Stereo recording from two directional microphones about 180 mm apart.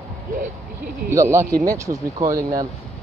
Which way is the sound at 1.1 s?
15° right (ahead or behind).